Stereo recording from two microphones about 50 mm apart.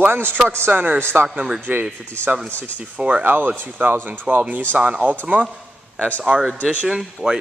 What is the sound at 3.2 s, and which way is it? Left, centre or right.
A man's voice, right.